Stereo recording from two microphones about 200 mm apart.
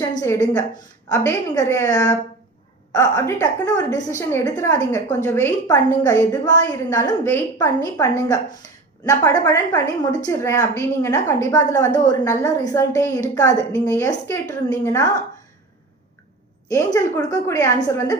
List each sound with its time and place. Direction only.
0.2 s a woman's voice: 15° left (ahead or behind)
16.6 s a woman's voice: 15° left (ahead or behind)